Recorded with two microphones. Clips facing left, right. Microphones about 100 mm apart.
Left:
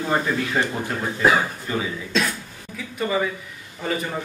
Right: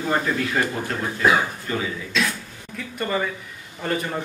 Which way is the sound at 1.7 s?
15° left (ahead or behind).